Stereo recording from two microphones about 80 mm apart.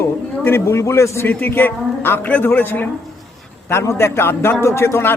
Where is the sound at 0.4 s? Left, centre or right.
Left.